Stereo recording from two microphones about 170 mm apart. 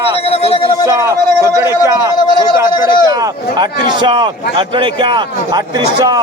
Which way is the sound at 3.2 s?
25° right (ahead or behind).